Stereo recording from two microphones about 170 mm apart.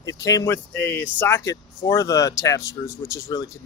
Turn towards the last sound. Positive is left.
turn(degrees=15)  # may be behind; listen again after turning